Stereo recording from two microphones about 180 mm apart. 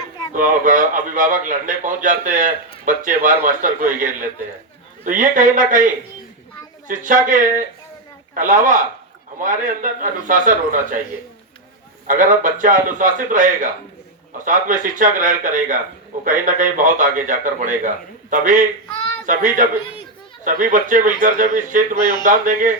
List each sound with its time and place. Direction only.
0.3 s a man's voice: 45° right (ahead or behind)
12.0 s a man's voice: 45° right (ahead or behind)